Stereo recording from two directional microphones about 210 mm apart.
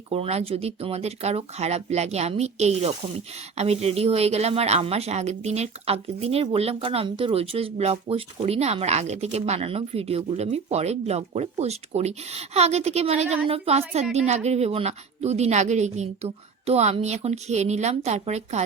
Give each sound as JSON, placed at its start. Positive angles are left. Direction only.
{"t": 0.1, "sound": "a woman's voice", "side_deg": -30}